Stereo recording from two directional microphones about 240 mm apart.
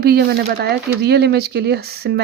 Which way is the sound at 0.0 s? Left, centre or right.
Right.